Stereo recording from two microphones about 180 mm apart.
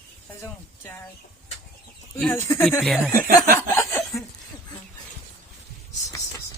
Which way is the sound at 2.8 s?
Centre (ahead or behind).